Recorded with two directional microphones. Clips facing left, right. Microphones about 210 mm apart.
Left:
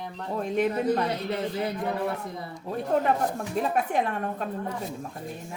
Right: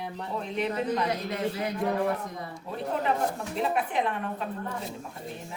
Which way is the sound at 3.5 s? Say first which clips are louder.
Left 3 dB; 45° left (ahead or behind).